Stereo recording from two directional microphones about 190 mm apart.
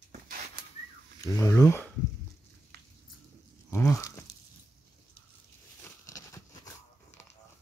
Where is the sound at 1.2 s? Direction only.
15° left (ahead or behind).